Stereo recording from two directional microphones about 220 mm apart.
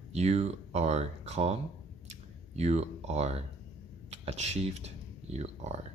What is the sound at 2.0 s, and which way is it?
Clicking, 30° right (ahead or behind).